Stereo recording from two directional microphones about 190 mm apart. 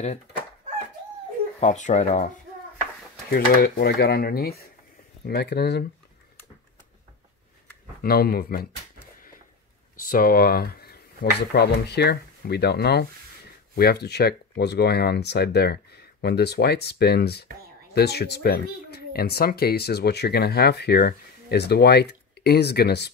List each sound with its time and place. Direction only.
1.6 s speech: 40° left (ahead or behind)
3.3 s speech: 50° left (ahead or behind)
8.0 s speech: 55° left (ahead or behind)
10.0 s speech: 50° left (ahead or behind)